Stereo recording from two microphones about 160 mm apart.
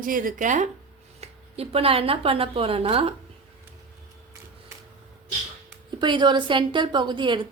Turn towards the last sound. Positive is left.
turn(degrees=-30)  # may be behind; listen again after turning